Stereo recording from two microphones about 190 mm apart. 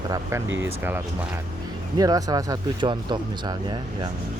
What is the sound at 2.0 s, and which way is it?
Speech, 20° right (ahead or behind).